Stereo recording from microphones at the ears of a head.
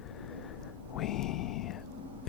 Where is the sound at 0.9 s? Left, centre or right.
Left.